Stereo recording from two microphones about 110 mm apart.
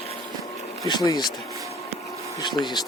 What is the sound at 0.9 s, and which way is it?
Speech, 40° left (ahead or behind).